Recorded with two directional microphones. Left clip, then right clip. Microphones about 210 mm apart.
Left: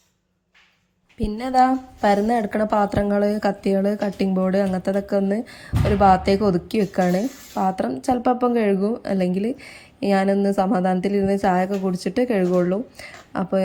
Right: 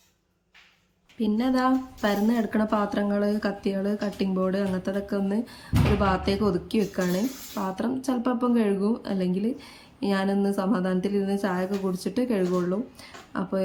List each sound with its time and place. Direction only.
1.2 s a woman's voice: 25° left (ahead or behind)